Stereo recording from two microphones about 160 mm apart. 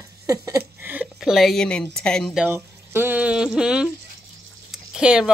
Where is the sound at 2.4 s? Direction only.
15° right (ahead or behind).